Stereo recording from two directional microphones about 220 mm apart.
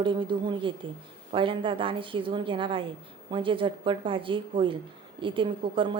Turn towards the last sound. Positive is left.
turn(degrees=-20)  # may be behind; listen again after turning